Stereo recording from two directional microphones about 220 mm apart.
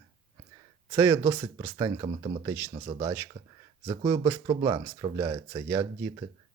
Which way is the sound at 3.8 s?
20° right (ahead or behind).